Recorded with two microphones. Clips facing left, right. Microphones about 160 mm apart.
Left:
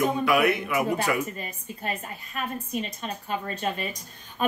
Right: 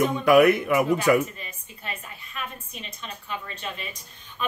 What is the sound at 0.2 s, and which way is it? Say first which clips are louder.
Speech: right 6 dB; 45° right (ahead or behind).